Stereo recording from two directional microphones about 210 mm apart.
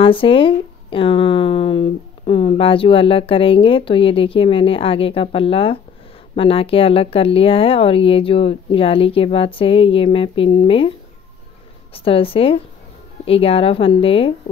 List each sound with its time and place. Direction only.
0.0 s speech: 25° left (ahead or behind)